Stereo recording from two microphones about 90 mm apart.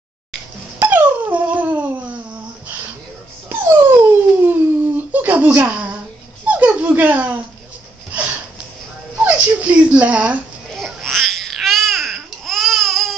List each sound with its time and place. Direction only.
0.7 s dog: 20° right (ahead or behind)
3.4 s dog: 25° right (ahead or behind)
4.9 s a sound: 20° right (ahead or behind)
5.6 s speech: 15° right (ahead or behind)
6.4 s dog: 20° right (ahead or behind)
8.1 s a sound: 15° right (ahead or behind)
9.2 s dog: 15° right (ahead or behind)
10.7 s babbling: centre (ahead or behind)